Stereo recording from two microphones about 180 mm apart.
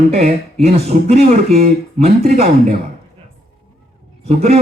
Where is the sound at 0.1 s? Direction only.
35° right (ahead or behind).